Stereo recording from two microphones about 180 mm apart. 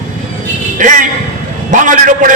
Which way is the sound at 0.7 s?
45° right (ahead or behind).